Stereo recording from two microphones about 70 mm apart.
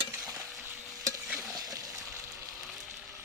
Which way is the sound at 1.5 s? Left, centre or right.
Right.